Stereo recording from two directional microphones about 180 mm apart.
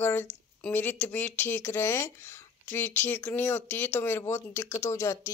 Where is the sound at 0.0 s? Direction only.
10° left (ahead or behind).